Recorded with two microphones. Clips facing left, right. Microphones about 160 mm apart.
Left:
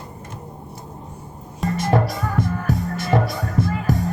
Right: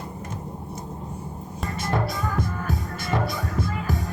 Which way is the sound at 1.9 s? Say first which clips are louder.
Left 3 dB; 55° left (ahead or behind).